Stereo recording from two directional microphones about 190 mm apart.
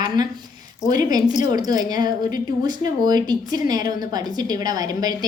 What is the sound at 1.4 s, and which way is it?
A woman's voice, 20° right (ahead or behind).